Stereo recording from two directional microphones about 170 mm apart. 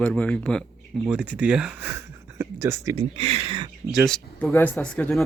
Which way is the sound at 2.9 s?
35° right (ahead or behind).